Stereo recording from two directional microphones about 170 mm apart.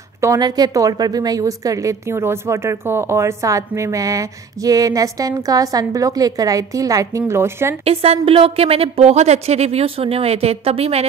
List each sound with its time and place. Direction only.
0.2 s a woman's voice: 20° right (ahead or behind)
7.8 s a woman's voice: 35° right (ahead or behind)